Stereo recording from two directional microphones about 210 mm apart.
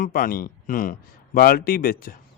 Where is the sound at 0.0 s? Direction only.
40° left (ahead or behind).